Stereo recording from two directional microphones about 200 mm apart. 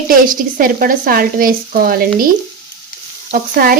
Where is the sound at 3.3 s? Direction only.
45° right (ahead or behind).